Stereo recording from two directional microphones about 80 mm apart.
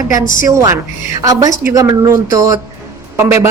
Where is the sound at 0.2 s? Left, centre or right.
Right.